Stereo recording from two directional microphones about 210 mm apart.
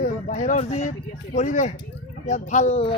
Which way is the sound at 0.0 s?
40° left (ahead or behind).